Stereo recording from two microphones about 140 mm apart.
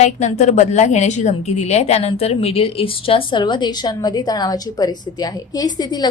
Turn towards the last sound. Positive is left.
turn(degrees=30)  # may be behind; listen again after turning